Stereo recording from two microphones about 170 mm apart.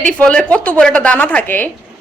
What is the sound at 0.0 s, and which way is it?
A woman's voice, 5° left (ahead or behind).